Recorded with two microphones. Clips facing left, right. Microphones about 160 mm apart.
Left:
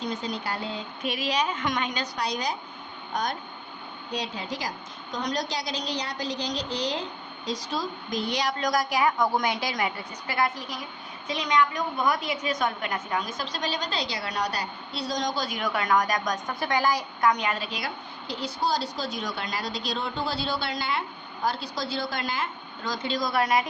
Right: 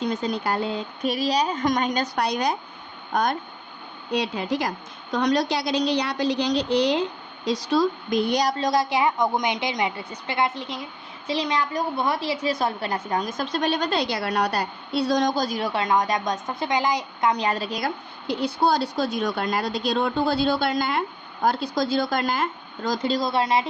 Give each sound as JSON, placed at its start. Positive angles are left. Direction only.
{"t": 0.0, "sound": "speech", "side_deg": -50}
{"t": 1.0, "sound": "a woman's voice", "side_deg": -40}
{"t": 4.1, "sound": "a woman's voice", "side_deg": -65}
{"t": 8.3, "sound": "a woman's voice", "side_deg": -40}
{"t": 15.4, "sound": "a woman's voice", "side_deg": -30}